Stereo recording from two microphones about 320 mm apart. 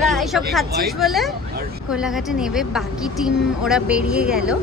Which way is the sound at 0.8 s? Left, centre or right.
Centre.